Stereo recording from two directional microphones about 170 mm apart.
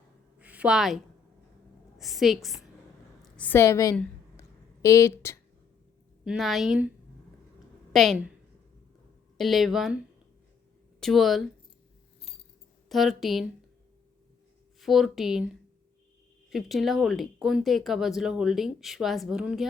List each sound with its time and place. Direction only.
0.3 s a sound: 10° right (ahead or behind)
2.0 s a woman's voice: centre (ahead or behind); by 3.9 s 20° left (ahead or behind)
3.9 s a sound: 15° left (ahead or behind)
6.2 s speech: centre (ahead or behind)
7.9 s speech: centre (ahead or behind)
9.4 s speech: centre (ahead or behind)
11.0 s speech: centre (ahead or behind)
12.9 s speech: centre (ahead or behind)
14.8 s speech: centre (ahead or behind)
16.5 s speech: centre (ahead or behind)